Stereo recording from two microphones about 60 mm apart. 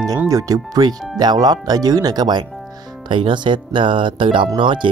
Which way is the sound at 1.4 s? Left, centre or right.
Right.